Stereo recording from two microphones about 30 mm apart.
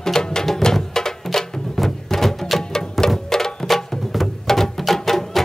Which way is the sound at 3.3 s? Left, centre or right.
Centre.